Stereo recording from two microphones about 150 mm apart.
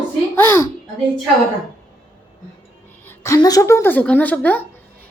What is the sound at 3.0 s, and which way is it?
A woman's voice, 15° left (ahead or behind).